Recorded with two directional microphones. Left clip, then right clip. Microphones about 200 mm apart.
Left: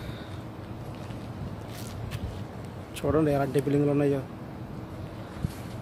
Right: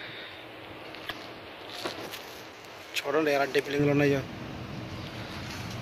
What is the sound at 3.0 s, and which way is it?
Speech, centre (ahead or behind).